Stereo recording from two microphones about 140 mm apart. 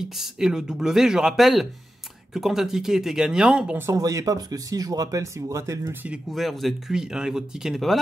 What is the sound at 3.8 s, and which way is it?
Speech, 25° right (ahead or behind).